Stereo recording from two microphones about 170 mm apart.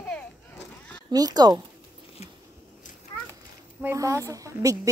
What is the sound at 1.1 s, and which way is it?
Speech, 20° right (ahead or behind).